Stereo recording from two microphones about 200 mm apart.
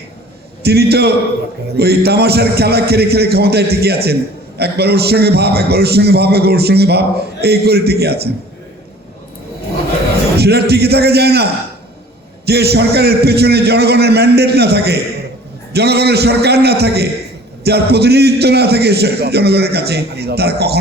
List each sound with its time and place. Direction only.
0.6 s a man's voice: 55° right (ahead or behind)
10.3 s a man's voice: 55° right (ahead or behind)
12.5 s a man's voice: 55° right (ahead or behind)